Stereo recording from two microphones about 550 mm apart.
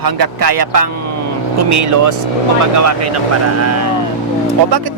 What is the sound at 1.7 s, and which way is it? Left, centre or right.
Speech, right.